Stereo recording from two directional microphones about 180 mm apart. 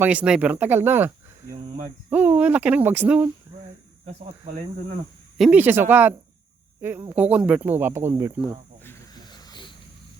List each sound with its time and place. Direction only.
0.0 s speech: 5° right (ahead or behind)
5.4 s speech: 10° right (ahead or behind)
9.1 s a sound: 25° left (ahead or behind)